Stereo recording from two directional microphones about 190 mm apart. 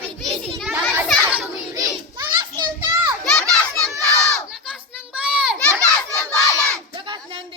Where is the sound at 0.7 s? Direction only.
10° right (ahead or behind).